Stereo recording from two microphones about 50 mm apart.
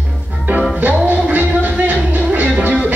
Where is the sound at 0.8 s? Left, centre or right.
Right.